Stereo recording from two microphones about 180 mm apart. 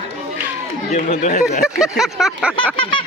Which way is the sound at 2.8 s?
25° left (ahead or behind).